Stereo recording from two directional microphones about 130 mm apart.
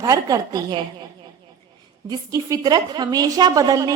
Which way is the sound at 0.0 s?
25° right (ahead or behind).